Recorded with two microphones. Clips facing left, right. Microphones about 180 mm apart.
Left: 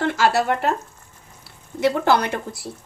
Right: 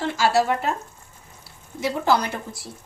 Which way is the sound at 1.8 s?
65° left (ahead or behind).